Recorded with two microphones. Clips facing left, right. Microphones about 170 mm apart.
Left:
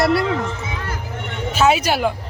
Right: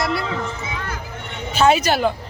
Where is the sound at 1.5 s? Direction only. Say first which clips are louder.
Right 1 dB; 5° left (ahead or behind).